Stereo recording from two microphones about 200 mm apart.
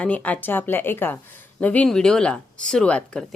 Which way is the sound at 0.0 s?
5° left (ahead or behind).